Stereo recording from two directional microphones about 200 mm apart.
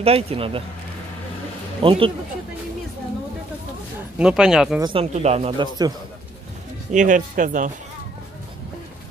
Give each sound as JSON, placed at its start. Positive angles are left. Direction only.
{"t": 0.0, "sound": "speech", "side_deg": -30}
{"t": 1.8, "sound": "speech", "side_deg": -25}
{"t": 4.2, "sound": "speech", "side_deg": -5}
{"t": 4.7, "sound": "speech", "side_deg": -20}
{"t": 6.9, "sound": "speech", "side_deg": -40}